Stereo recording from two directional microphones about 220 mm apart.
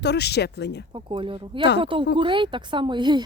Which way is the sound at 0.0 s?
50° left (ahead or behind).